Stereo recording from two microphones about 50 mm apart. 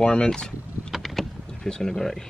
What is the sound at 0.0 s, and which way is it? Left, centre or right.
Speech, centre.